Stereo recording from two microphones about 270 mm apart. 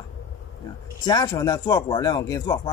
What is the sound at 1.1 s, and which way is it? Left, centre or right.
Speech, centre.